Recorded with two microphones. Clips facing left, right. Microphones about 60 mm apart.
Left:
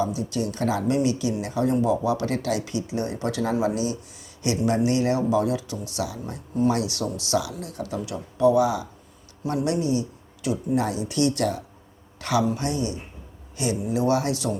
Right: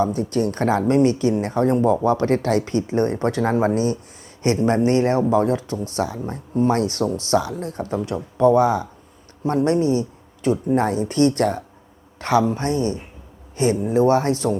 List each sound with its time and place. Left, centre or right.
0.0 s speech: right